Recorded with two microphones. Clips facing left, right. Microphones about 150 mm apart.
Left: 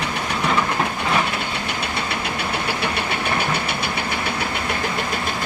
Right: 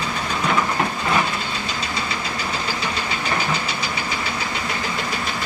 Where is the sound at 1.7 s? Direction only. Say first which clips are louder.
Left 1 dB; 60° left (ahead or behind).